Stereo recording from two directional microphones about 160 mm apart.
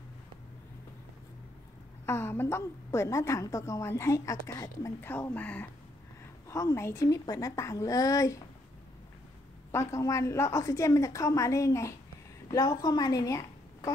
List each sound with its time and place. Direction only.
2.0 s a woman's voice: 15° left (ahead or behind)
9.7 s a woman's voice: 15° left (ahead or behind)